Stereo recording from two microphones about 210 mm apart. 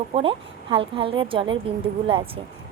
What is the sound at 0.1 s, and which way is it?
Speech, 25° right (ahead or behind).